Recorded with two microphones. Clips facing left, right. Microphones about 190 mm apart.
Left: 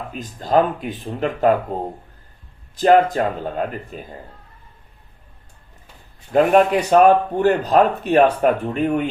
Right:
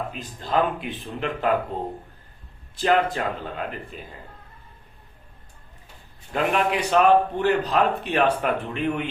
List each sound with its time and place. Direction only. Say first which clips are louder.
0.1 s a man's voice: left 7 dB; 40° left (ahead or behind)
2.7 s a man's voice: left 7 dB; 45° left (ahead or behind)
6.3 s a man's voice: left 9 dB; 45° left (ahead or behind)